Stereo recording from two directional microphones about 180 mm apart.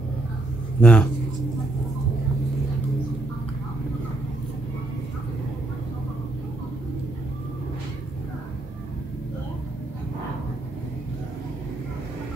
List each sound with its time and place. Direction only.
0.7 s speech: 5° left (ahead or behind)